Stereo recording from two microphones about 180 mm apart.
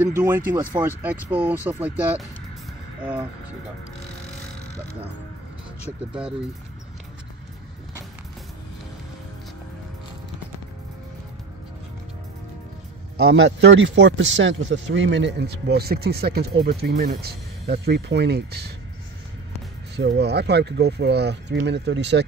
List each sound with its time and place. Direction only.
0.0 s speech: 10° right (ahead or behind)
13.3 s speech: 85° right; by 18.7 s 65° right (ahead or behind)
20.0 s speech: 70° right (ahead or behind)